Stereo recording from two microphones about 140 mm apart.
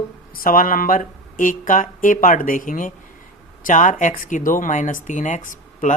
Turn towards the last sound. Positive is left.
turn(degrees=65)  # may be behind; listen again after turning